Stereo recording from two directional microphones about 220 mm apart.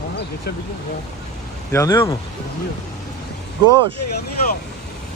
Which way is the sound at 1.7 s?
15° left (ahead or behind).